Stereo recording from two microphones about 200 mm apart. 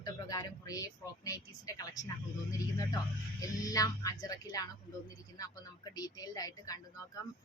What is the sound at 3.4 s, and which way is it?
A woman's voice, 15° left (ahead or behind).